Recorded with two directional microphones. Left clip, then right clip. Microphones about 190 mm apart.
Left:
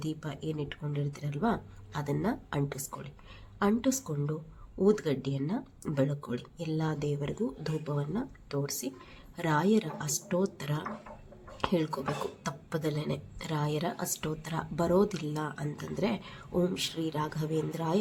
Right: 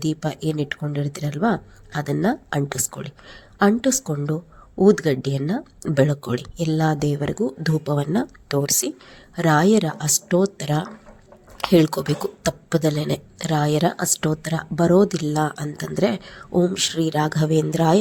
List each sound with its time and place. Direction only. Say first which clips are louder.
0.0 s speech: right 13 dB; 45° right (ahead or behind)
16.7 s speech: right 12 dB; 40° right (ahead or behind)